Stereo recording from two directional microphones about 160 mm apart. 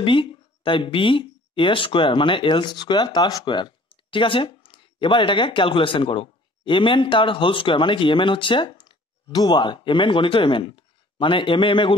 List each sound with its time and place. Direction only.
0.0 s speech: 35° left (ahead or behind)